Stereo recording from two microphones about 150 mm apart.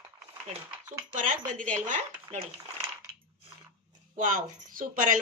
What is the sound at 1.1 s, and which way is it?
Speech, 55° right (ahead or behind).